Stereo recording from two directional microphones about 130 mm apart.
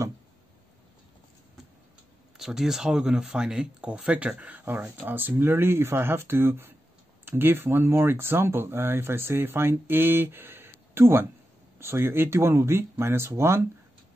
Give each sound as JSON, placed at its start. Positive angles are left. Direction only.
{"t": 2.3, "sound": "speech", "side_deg": -5}